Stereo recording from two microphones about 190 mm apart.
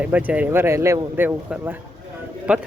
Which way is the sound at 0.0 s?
10° right (ahead or behind).